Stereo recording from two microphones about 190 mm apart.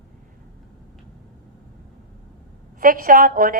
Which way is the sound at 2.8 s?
45° right (ahead or behind).